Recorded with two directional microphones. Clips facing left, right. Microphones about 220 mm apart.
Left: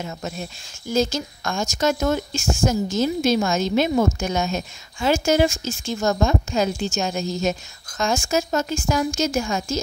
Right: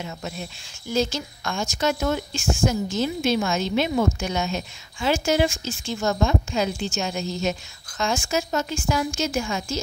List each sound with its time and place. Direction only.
0.0 s a woman's voice: 45° left (ahead or behind)